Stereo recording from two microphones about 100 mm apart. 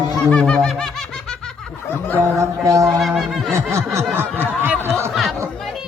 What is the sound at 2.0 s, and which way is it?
Speech, 15° left (ahead or behind).